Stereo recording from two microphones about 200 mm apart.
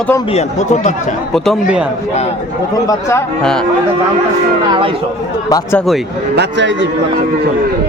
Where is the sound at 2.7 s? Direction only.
15° left (ahead or behind).